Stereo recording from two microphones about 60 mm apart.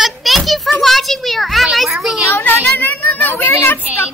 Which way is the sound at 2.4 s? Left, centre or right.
Left.